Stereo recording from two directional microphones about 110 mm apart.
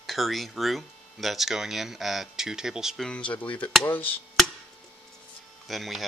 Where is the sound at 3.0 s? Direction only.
10° left (ahead or behind).